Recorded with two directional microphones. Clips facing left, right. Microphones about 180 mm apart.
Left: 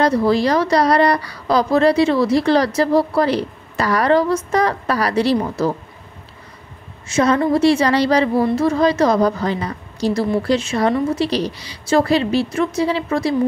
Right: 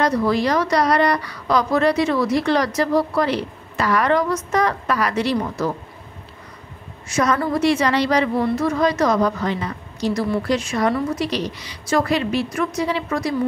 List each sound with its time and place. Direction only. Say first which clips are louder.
0.0 s a woman's voice: left 3 dB; 30° left (ahead or behind)
7.1 s a woman's voice: left 4 dB; 25° left (ahead or behind)